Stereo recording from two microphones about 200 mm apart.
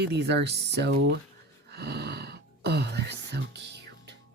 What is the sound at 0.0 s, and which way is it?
Speech, 55° right (ahead or behind).